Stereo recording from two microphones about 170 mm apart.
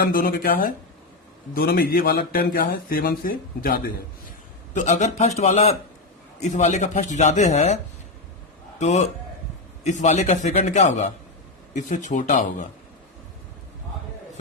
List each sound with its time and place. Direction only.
0.0 s speech: 60° left (ahead or behind)
4.7 s a man's voice: 45° left (ahead or behind)
8.8 s speech: 45° left (ahead or behind)